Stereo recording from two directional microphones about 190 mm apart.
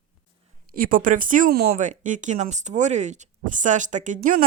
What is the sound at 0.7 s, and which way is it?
Speech, 45° right (ahead or behind).